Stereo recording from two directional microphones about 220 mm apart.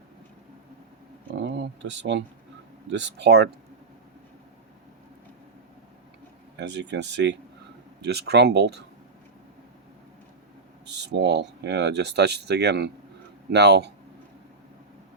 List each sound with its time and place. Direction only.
1.4 s speech: 55° right (ahead or behind)
6.6 s speech: 50° right (ahead or behind)
10.8 s speech: 50° right (ahead or behind)